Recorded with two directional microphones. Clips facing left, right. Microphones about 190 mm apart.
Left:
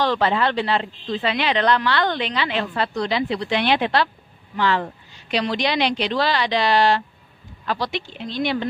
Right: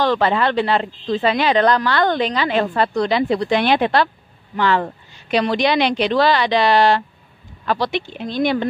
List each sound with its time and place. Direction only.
0.0 s speech: 50° right (ahead or behind)